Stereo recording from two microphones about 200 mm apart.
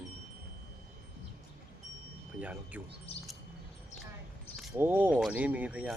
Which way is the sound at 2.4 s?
5° right (ahead or behind).